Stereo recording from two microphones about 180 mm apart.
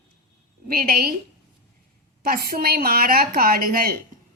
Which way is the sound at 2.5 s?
55° right (ahead or behind).